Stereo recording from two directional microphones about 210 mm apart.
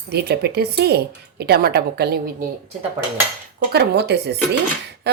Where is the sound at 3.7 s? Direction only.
50° right (ahead or behind).